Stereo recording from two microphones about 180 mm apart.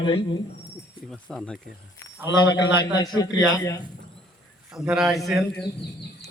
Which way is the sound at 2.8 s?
20° left (ahead or behind).